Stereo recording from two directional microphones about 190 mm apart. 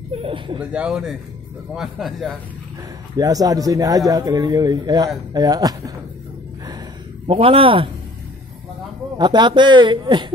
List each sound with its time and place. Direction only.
0.1 s a sound: 25° right (ahead or behind)
0.6 s speech: 5° right (ahead or behind)
3.2 s speech: 20° right (ahead or behind)
7.2 s speech: 30° right (ahead or behind)
9.2 s speech: 25° right (ahead or behind)